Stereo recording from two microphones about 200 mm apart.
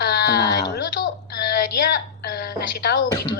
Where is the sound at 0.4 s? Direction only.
20° left (ahead or behind).